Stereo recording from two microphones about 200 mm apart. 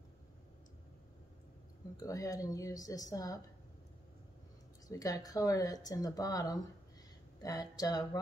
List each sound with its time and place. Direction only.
2.0 s speech: 15° left (ahead or behind)
4.8 s speech: 20° left (ahead or behind)